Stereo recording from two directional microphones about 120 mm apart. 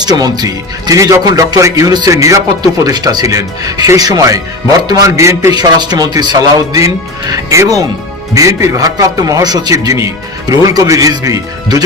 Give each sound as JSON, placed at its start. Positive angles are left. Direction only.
{"t": 0.0, "sound": "speech", "side_deg": -35}